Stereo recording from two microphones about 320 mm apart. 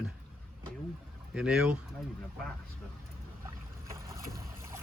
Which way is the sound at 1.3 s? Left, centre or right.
Centre.